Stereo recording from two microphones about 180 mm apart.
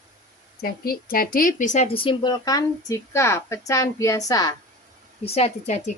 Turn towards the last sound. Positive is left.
turn(degrees=40)  # may be behind; listen again after turning